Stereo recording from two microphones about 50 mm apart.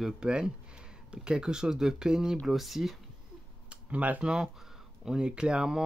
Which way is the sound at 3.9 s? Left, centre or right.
Right.